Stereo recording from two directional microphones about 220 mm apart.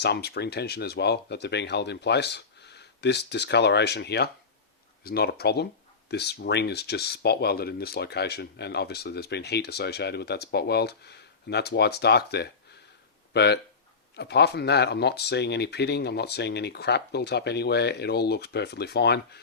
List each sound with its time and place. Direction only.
0.0 s speech: 50° left (ahead or behind)